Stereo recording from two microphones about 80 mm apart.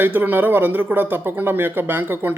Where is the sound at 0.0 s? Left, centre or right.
Right.